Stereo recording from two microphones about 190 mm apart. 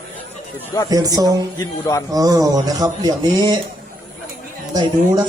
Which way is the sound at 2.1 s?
20° right (ahead or behind).